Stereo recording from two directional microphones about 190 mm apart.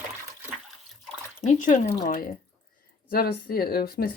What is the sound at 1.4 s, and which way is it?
Speech, 40° left (ahead or behind).